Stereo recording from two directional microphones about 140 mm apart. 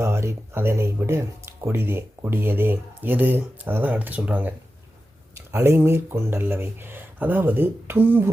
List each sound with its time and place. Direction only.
0.0 s speech: 20° right (ahead or behind)